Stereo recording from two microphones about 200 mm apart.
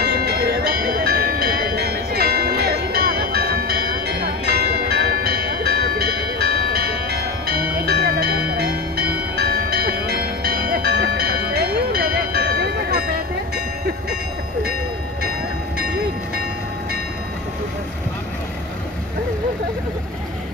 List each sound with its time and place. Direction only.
0.0 s music: 50° right (ahead or behind)
7.7 s bell: 55° right (ahead or behind)